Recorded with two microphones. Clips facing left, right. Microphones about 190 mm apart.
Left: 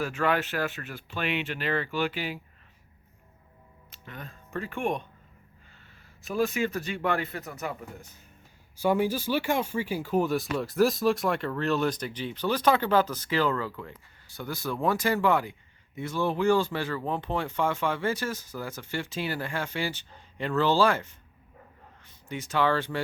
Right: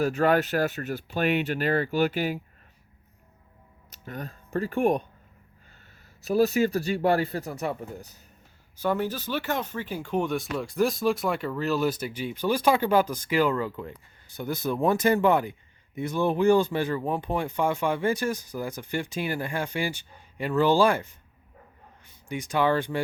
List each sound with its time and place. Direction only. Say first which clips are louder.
0.0 s speech: right 5 dB; 40° right (ahead or behind)
3.8 s speech: right 6 dB; 40° right (ahead or behind)
6.2 s speech: right 5 dB; 40° right (ahead or behind)
8.8 s speech: left 2 dB; 10° left (ahead or behind); by 21.1 s 15° right (ahead or behind)
22.3 s speech: right 2 dB; 15° right (ahead or behind)